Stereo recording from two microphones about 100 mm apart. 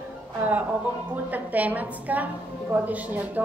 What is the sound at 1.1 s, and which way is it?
Speech, 15° right (ahead or behind).